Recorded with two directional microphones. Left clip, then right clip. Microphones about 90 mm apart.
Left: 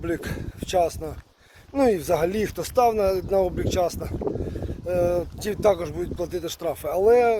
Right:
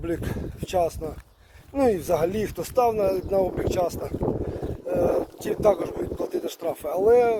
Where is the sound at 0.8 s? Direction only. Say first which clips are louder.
Left 2 dB; 15° left (ahead or behind); by 3.8 s 35° left (ahead or behind).